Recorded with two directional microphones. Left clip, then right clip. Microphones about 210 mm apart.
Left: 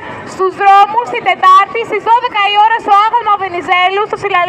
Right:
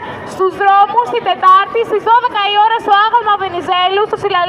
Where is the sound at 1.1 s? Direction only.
30° left (ahead or behind).